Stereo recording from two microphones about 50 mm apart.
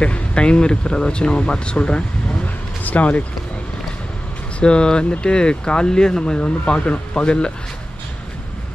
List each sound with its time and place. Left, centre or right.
0.0 s speech: left
2.8 s speech: left
4.6 s speech: centre